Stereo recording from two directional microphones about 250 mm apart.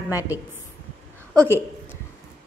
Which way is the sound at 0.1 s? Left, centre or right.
Centre.